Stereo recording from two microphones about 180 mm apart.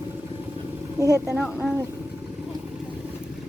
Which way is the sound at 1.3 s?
5° right (ahead or behind).